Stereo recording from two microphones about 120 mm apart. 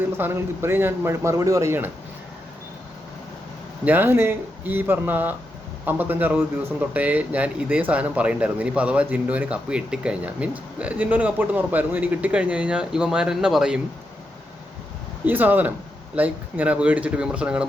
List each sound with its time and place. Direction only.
0.0 s a man's voice: 20° right (ahead or behind)
3.8 s speech: 15° right (ahead or behind)
15.3 s speech: 15° right (ahead or behind)